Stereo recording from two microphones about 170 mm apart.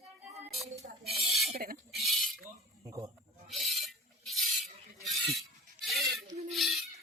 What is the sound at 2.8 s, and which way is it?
Bleat, 20° right (ahead or behind).